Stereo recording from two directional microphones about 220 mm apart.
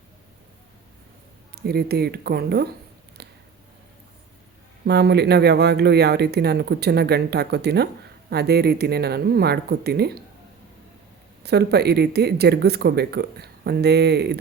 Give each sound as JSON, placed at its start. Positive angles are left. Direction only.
{"t": 1.5, "sound": "speech", "side_deg": -45}
{"t": 3.2, "sound": "a sound", "side_deg": -50}
{"t": 4.9, "sound": "speech", "side_deg": -50}
{"t": 11.4, "sound": "speech", "side_deg": -50}